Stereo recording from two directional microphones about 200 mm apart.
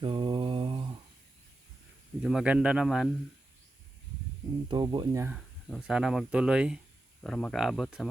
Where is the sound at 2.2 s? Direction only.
5° right (ahead or behind).